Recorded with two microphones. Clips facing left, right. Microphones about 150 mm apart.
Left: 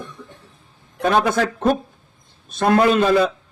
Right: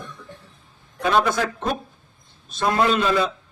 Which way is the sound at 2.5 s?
55° left (ahead or behind).